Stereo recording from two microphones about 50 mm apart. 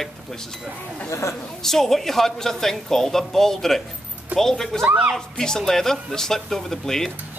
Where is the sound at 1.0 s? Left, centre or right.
Left.